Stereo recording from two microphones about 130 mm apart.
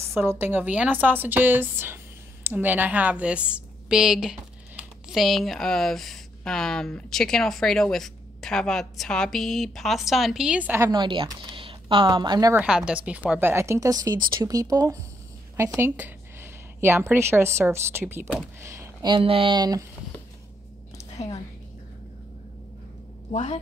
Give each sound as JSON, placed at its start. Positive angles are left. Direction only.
{"t": 0.1, "sound": "a woman's voice", "side_deg": -15}
{"t": 10.8, "sound": "speech", "side_deg": -35}
{"t": 12.5, "sound": "a woman's voice", "side_deg": -5}
{"t": 19.0, "sound": "speech", "side_deg": -40}
{"t": 23.3, "sound": "speech", "side_deg": 55}